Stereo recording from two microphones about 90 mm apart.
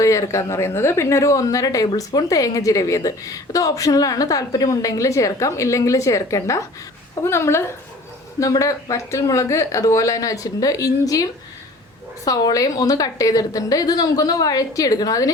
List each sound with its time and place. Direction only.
0.0 s a woman's voice: 35° left (ahead or behind)